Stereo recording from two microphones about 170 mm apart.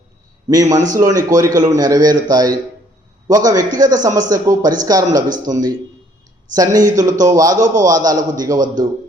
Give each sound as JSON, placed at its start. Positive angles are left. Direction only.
{"t": 0.4, "sound": "a man's voice", "side_deg": -20}